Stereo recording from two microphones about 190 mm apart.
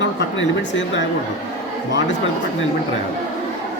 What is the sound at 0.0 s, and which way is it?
Speech, 70° left (ahead or behind).